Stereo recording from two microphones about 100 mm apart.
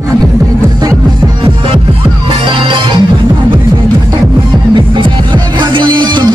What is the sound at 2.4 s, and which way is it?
Music, 55° right (ahead or behind).